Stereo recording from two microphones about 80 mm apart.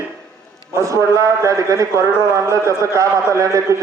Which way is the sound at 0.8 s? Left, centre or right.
Right.